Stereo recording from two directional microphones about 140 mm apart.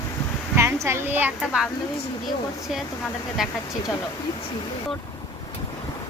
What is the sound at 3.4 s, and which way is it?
Speech, centre (ahead or behind).